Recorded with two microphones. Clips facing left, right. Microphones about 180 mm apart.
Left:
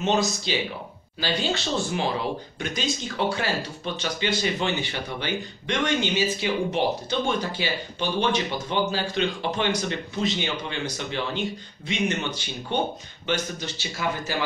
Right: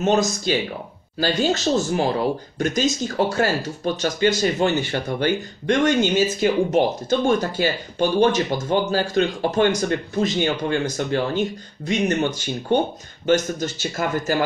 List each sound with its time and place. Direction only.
0.0 s speech: 50° right (ahead or behind)